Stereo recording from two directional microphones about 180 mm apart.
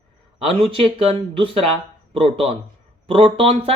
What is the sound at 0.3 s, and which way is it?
Speech, 30° right (ahead or behind).